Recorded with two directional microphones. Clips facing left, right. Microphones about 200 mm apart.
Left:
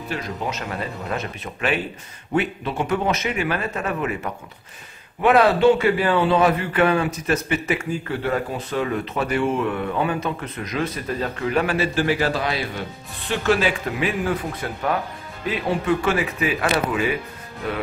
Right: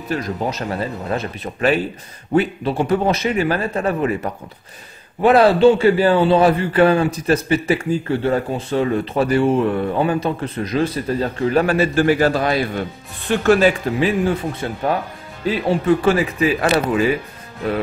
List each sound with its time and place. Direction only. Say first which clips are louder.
0.1 s a man's voice: right 6 dB; 35° right (ahead or behind)